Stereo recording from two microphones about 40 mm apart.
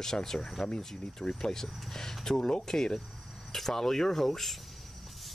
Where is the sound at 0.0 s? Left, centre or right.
Centre.